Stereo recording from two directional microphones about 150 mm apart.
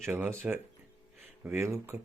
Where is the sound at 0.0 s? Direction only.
15° right (ahead or behind).